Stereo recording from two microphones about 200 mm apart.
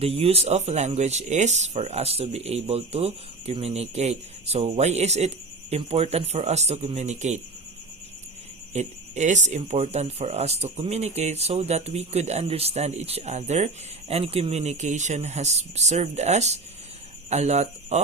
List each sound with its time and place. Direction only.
0.0 s speech: 30° right (ahead or behind)
8.7 s speech: 35° right (ahead or behind)